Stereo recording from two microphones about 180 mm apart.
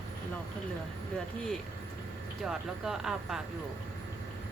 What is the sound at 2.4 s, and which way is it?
Speech, centre (ahead or behind).